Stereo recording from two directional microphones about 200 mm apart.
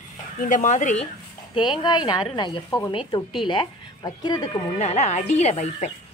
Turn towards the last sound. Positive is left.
turn(degrees=35)  # may be behind; listen again after turning